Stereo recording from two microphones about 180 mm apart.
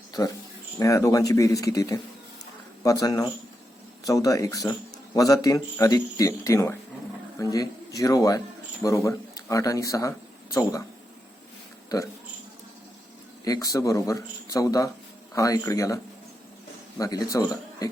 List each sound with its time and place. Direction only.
0.1 s a man's voice: 20° left (ahead or behind)
13.4 s speech: 20° left (ahead or behind)
17.0 s speech: 20° left (ahead or behind)